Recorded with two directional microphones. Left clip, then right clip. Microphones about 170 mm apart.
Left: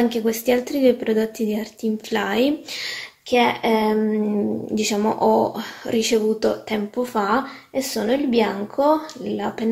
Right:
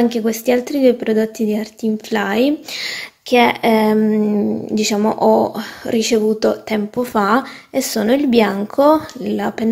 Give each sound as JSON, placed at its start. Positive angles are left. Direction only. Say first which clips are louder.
{"t": 0.0, "sound": "speech", "louder": "right 3 dB", "side_deg": -30}
{"t": 4.1, "sound": "speech", "louder": "right 5 dB", "side_deg": -30}